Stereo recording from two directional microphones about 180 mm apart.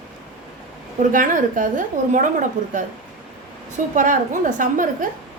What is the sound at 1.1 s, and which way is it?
A woman's voice, 45° right (ahead or behind).